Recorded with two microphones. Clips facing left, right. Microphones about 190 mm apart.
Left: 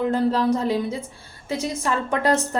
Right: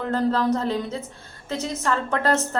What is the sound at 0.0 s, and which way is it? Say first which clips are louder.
A woman's voice: left 2 dB; 10° left (ahead or behind).